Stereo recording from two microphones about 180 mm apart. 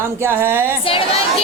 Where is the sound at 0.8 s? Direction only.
30° left (ahead or behind).